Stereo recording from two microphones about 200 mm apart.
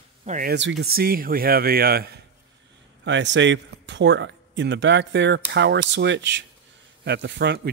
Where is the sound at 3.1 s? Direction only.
65° right (ahead or behind).